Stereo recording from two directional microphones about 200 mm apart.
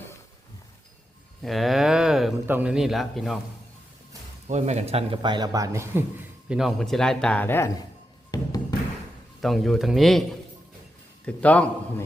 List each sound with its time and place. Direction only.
1.4 s speech: centre (ahead or behind)
4.4 s a man's voice: 35° right (ahead or behind); by 7.9 s 10° left (ahead or behind)
9.4 s speech: centre (ahead or behind)
11.3 s a man's voice: 5° left (ahead or behind)